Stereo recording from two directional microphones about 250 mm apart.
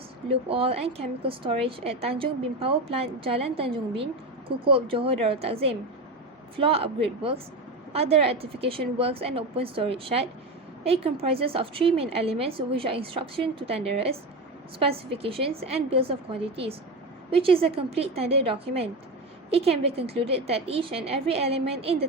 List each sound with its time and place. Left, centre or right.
0.3 s a woman's voice: right
17.3 s a woman's voice: right